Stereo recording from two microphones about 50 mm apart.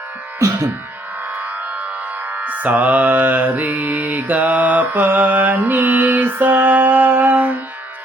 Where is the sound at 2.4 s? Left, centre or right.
Right.